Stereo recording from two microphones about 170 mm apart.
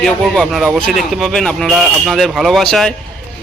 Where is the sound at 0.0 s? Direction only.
Centre (ahead or behind).